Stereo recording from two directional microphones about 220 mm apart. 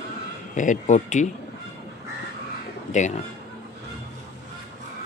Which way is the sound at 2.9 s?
35° left (ahead or behind).